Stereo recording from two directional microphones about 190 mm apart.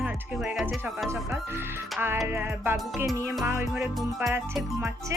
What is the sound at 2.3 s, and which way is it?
Speech, 10° right (ahead or behind).